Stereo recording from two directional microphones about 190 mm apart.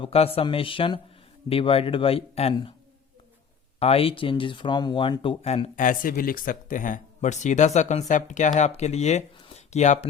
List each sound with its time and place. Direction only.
0.0 s speech: 30° left (ahead or behind)
3.8 s speech: 30° left (ahead or behind)